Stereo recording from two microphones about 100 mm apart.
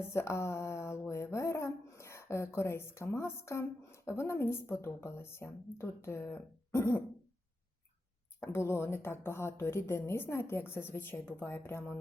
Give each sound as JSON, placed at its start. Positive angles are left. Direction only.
{"t": 0.1, "sound": "speech", "side_deg": 25}
{"t": 8.4, "sound": "speech", "side_deg": 25}